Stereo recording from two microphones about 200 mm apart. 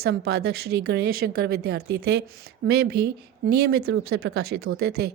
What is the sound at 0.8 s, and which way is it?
Speech, 55° right (ahead or behind).